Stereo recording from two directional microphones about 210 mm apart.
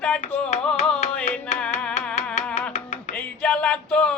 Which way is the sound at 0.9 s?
5° left (ahead or behind).